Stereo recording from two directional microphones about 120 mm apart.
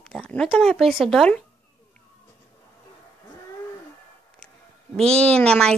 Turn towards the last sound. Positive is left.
turn(degrees=10)  # may be behind; listen again after turning